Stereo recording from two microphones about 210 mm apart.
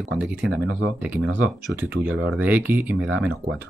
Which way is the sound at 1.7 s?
5° right (ahead or behind).